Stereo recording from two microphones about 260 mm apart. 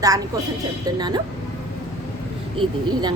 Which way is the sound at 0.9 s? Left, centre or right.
Centre.